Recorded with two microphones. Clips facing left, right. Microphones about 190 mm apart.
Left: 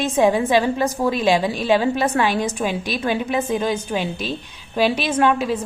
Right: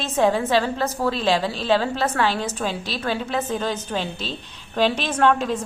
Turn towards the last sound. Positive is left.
turn(degrees=10)  # may be behind; listen again after turning